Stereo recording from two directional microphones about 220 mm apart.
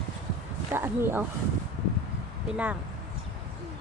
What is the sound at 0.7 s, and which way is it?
Speech, 10° right (ahead or behind).